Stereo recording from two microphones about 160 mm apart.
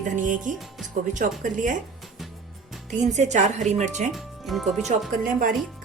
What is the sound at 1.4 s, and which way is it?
Speech, 55° right (ahead or behind).